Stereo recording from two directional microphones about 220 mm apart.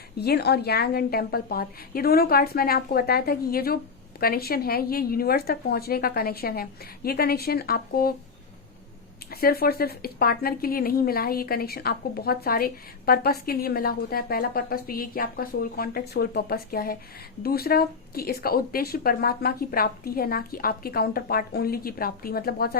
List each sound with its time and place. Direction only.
0.2 s speech: 45° left (ahead or behind)
9.3 s speech: 45° left (ahead or behind)